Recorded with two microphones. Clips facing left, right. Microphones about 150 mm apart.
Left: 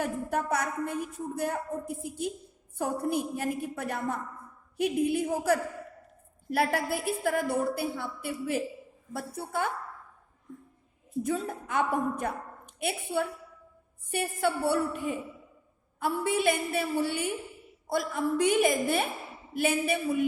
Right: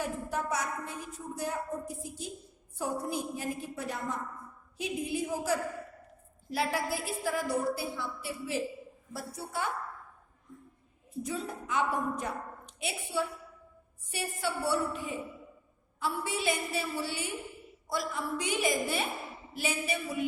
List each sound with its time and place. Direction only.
0.0 s a woman's voice: 60° left (ahead or behind)
11.2 s a woman's voice: 50° left (ahead or behind)